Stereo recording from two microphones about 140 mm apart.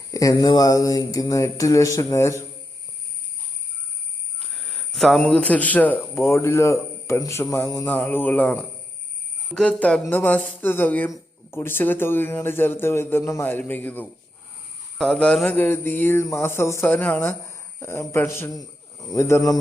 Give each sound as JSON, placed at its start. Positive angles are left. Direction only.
{"t": 0.1, "sound": "speech", "side_deg": 25}
{"t": 4.5, "sound": "speech", "side_deg": 0}
{"t": 9.6, "sound": "speech", "side_deg": 5}